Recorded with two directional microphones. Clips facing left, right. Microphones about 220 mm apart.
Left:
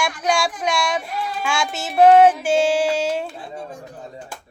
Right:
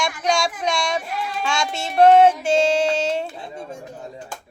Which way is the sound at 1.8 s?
5° left (ahead or behind).